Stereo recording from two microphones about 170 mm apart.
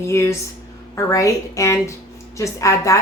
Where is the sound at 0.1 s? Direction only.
15° left (ahead or behind).